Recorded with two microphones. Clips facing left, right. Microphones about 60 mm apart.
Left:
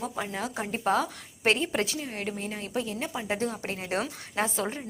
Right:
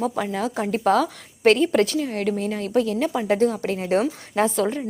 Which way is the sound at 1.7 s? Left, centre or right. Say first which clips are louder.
Right 10 dB; right.